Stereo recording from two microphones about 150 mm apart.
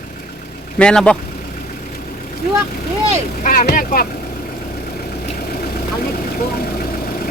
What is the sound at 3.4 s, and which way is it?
Speech, 70° left (ahead or behind).